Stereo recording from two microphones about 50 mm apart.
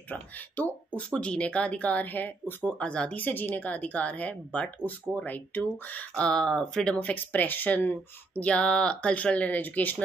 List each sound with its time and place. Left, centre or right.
0.1 s speech: left
1.1 s speech: left
2.8 s speech: left
3.2 s speech: left
6.2 s speech: centre
7.0 s speech: left
8.5 s speech: left